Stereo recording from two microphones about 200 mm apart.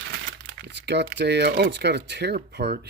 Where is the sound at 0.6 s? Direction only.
60° right (ahead or behind).